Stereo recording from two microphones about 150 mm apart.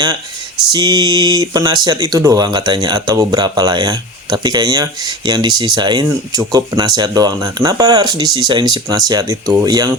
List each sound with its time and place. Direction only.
0.7 s speech: 30° right (ahead or behind)